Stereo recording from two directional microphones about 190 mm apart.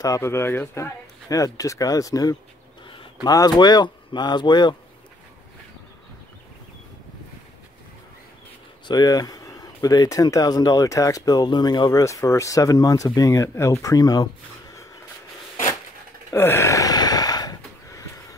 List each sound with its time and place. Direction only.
0.0 s speech: 15° left (ahead or behind)
8.8 s speech: 20° left (ahead or behind)
16.3 s a sound: 15° left (ahead or behind)